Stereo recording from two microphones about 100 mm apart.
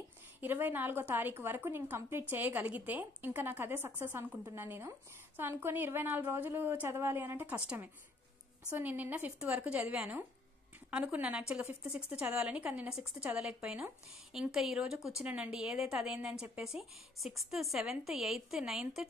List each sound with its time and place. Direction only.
0.4 s a woman's voice: 20° right (ahead or behind)
8.6 s a woman's voice: 15° right (ahead or behind)
15.2 s a woman's voice: 15° right (ahead or behind)
15.5 s a woman's voice: 5° right (ahead or behind)